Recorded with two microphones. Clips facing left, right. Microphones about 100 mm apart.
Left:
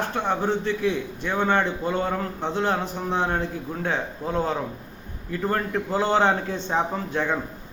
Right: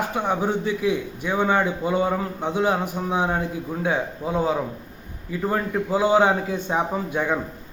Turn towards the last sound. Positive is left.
turn(degrees=-10)  # may be behind; listen again after turning